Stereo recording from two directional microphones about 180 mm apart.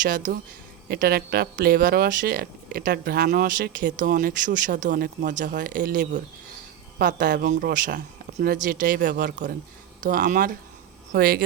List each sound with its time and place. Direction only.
0.0 s speech: 45° right (ahead or behind)
0.9 s speech: 60° right (ahead or behind)